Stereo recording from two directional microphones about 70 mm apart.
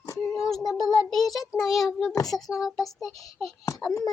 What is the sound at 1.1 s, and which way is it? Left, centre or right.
A child's voice, centre.